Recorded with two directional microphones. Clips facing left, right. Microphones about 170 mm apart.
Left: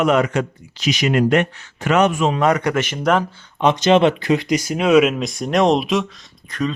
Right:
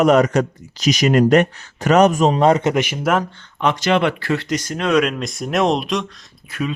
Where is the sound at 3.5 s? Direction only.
20° left (ahead or behind).